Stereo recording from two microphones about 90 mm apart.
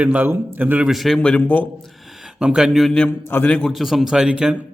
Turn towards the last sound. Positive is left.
turn(degrees=-10)  # may be behind; listen again after turning